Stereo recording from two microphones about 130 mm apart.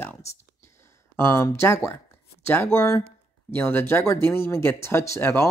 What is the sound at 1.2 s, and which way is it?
A man's voice, 20° left (ahead or behind).